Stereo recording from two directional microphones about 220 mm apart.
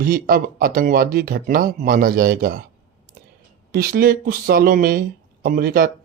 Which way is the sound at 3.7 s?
45° right (ahead or behind).